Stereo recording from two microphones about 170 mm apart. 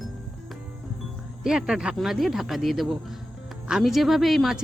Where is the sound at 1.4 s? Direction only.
5° right (ahead or behind).